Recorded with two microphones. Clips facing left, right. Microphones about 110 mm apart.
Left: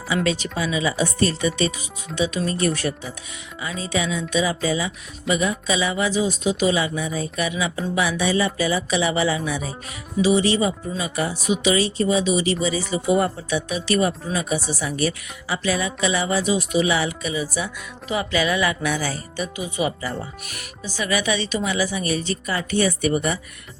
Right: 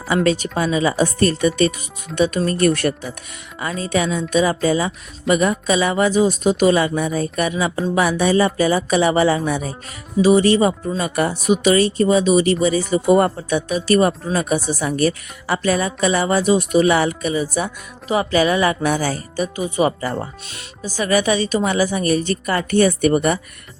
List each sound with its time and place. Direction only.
0.2 s speech: 45° right (ahead or behind)
20.1 s speech: 25° right (ahead or behind)
20.8 s speech: 45° right (ahead or behind)